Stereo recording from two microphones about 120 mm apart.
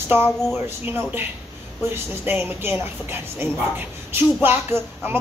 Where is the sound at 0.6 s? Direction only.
15° right (ahead or behind).